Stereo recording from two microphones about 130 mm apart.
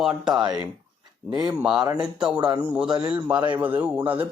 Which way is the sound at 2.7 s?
5° right (ahead or behind).